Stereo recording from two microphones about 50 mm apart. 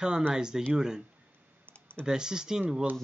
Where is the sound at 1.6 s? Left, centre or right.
Left.